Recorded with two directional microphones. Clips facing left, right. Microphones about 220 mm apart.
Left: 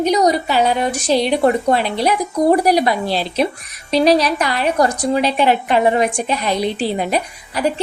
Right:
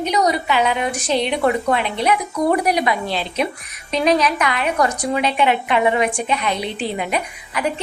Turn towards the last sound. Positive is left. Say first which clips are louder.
# left 4 dB
turn(degrees=35)  # may be behind; listen again after turning